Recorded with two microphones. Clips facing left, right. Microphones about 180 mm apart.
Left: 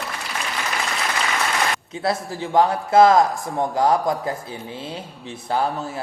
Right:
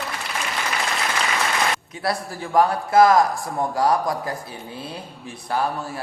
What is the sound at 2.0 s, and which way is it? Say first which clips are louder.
Speech: left 5 dB; 25° left (ahead or behind).